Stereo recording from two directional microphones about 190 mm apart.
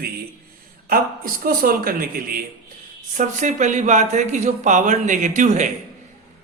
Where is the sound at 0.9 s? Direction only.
50° right (ahead or behind).